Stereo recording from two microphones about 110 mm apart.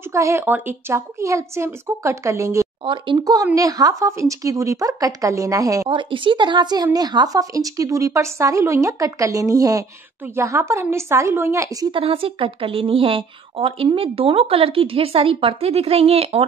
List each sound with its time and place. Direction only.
0.1 s a woman's voice: 25° right (ahead or behind)
2.8 s speech: 50° right (ahead or behind)
3.5 s speech: 35° right (ahead or behind)
5.9 s a woman's voice: 50° right (ahead or behind); by 11.9 s 30° right (ahead or behind)
11.9 s a woman's voice: 60° right (ahead or behind)